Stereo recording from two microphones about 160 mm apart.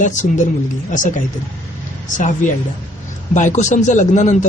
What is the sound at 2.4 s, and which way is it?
A woman's voice, 55° left (ahead or behind).